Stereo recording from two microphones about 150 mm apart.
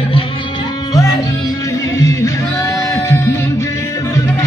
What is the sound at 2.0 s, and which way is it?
Music, 20° left (ahead or behind).